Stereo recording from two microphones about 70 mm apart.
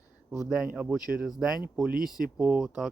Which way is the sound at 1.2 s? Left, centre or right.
Centre.